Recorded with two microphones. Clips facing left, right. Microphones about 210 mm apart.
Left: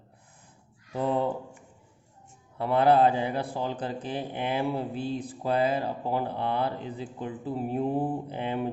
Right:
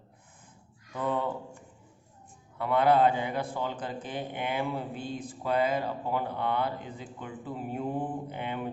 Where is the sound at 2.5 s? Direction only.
30° left (ahead or behind).